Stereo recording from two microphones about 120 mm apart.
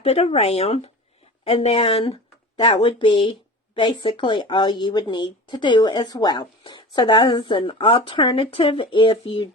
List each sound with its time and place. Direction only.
0.0 s speech: 60° left (ahead or behind)
2.6 s speech: 40° left (ahead or behind)